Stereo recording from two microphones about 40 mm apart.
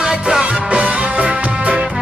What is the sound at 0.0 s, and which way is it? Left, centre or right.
Music, centre.